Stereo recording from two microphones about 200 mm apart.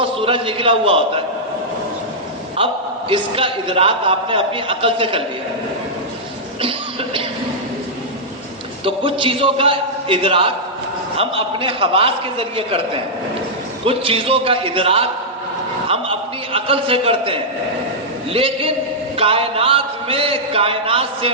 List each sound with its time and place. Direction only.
0.2 s a man's voice: 25° right (ahead or behind)
3.1 s a man's voice: 25° right (ahead or behind)
6.6 s speech: 25° right (ahead or behind)
8.8 s a man's voice: 25° right (ahead or behind)